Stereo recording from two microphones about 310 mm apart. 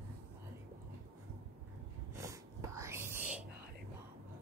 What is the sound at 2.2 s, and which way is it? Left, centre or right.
Whispering, centre.